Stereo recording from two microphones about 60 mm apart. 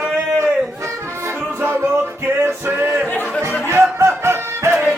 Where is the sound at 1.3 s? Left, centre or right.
Right.